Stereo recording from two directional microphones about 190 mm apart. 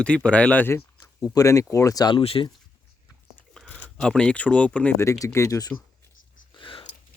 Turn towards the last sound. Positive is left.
turn(degrees=30)  # may be behind; listen again after turning